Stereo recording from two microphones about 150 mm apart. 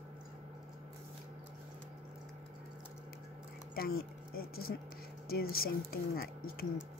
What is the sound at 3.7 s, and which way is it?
Speech, 90° left.